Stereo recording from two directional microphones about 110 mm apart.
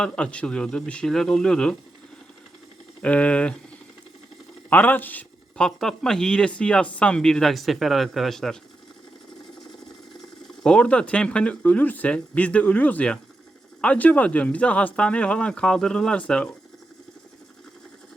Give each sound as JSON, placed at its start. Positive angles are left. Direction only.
{"t": 0.0, "sound": "speech", "side_deg": 10}
{"t": 3.0, "sound": "speech", "side_deg": 10}
{"t": 4.7, "sound": "speech", "side_deg": 15}
{"t": 10.6, "sound": "speech", "side_deg": 10}